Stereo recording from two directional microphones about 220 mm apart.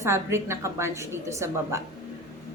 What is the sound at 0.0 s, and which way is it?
A woman's voice, 10° right (ahead or behind).